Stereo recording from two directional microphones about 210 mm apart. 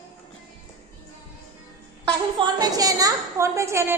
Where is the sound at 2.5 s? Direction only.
15° right (ahead or behind).